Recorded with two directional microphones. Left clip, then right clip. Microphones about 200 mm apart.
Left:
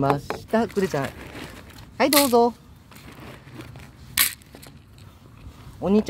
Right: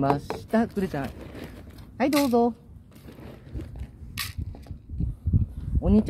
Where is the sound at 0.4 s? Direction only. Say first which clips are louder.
Left 4 dB; 20° left (ahead or behind).